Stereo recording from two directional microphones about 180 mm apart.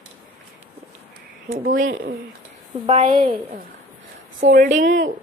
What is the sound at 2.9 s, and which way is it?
Speech, 45° right (ahead or behind).